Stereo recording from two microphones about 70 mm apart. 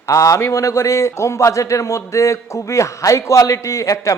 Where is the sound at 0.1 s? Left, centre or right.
Left.